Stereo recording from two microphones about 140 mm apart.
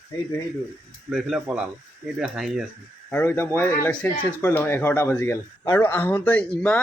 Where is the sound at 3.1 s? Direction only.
15° left (ahead or behind).